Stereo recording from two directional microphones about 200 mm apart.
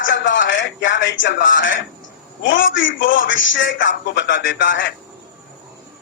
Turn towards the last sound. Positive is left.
turn(degrees=65)  # may be behind; listen again after turning